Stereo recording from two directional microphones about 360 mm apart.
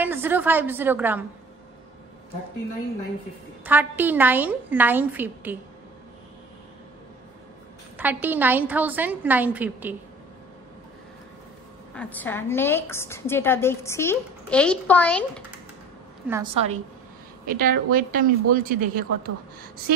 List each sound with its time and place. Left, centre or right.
0.0 s a woman's voice: centre
3.6 s a woman's voice: centre
8.0 s a woman's voice: centre
11.9 s a woman's voice: centre
16.3 s a woman's voice: centre
17.5 s speech: right